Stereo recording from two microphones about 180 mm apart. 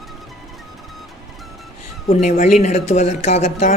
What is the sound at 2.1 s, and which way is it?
Speech, 45° left (ahead or behind).